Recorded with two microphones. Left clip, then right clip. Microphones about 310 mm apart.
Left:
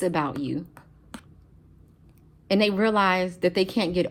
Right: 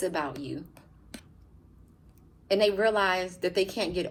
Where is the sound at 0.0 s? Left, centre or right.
Left.